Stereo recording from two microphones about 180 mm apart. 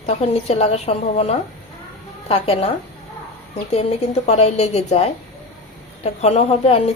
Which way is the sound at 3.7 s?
35° left (ahead or behind).